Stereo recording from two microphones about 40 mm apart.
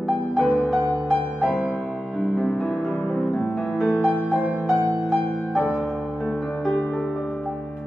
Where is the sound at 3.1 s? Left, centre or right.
Left.